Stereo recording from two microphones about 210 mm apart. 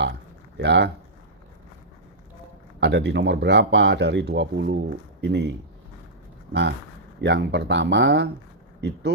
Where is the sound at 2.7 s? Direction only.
55° right (ahead or behind).